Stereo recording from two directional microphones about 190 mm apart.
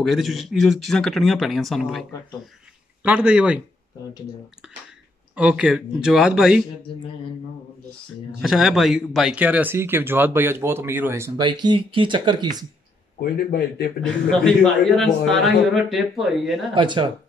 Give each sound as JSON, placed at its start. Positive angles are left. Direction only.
{"t": 0.0, "sound": "a man's voice", "side_deg": 0}
{"t": 5.3, "sound": "a man's voice", "side_deg": -5}
{"t": 8.4, "sound": "speech", "side_deg": 0}
{"t": 13.2, "sound": "speech", "side_deg": 55}
{"t": 14.0, "sound": "a man's voice", "side_deg": 5}
{"t": 16.7, "sound": "speech", "side_deg": -25}